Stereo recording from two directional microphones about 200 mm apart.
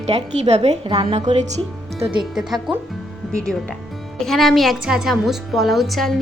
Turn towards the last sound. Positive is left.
turn(degrees=0)  # may be behind; listen again after turning